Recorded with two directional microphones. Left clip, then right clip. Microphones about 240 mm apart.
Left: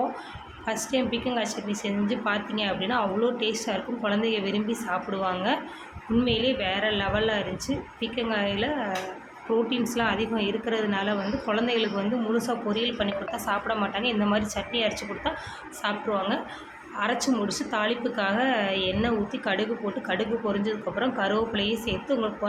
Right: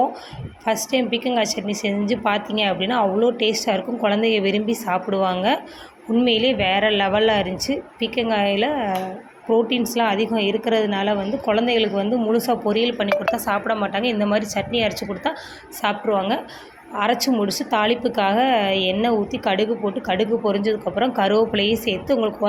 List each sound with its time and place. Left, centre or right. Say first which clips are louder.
0.6 s a woman's voice: right 7 dB; right